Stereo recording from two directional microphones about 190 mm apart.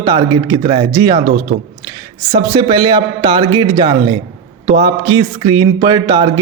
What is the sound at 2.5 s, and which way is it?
Speech, 25° right (ahead or behind).